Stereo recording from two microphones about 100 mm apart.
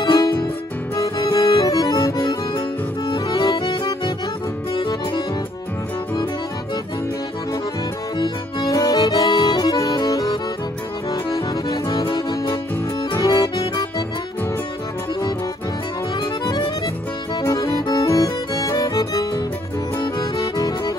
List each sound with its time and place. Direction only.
0.0 s music: 45° left (ahead or behind)
1.1 s accordion: 40° left (ahead or behind)
4.7 s music: 45° left (ahead or behind)
8.2 s accordion: 45° left (ahead or behind)
17.4 s music: 40° left (ahead or behind)
20.0 s accordion: 40° left (ahead or behind)